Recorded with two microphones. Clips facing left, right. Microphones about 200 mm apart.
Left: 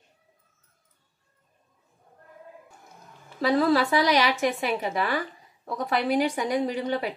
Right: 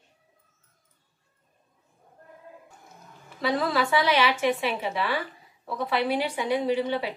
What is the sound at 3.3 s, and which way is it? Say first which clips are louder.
A woman's voice: left 4 dB; 40° left (ahead or behind).